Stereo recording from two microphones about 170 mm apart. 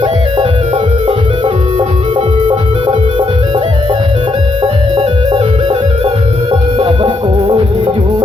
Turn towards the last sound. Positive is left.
turn(degrees=-30)  # may be behind; listen again after turning